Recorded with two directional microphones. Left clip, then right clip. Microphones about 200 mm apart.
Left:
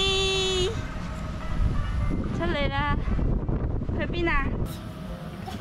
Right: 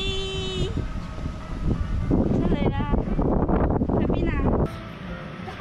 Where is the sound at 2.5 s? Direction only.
10° right (ahead or behind).